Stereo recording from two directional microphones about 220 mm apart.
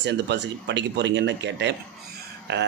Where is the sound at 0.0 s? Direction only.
50° right (ahead or behind).